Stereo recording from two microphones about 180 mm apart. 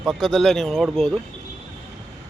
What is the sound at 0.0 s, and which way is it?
Speech, centre (ahead or behind).